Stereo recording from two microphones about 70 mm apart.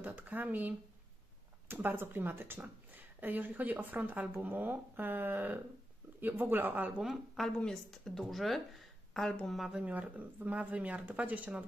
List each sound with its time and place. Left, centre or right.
0.0 s speech: right
7.0 s speech: centre
7.4 s speech: centre
9.6 s speech: centre
9.8 s speech: right